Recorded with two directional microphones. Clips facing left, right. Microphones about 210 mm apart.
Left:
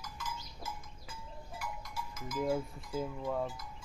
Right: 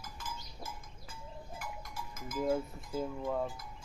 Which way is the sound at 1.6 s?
50° right (ahead or behind).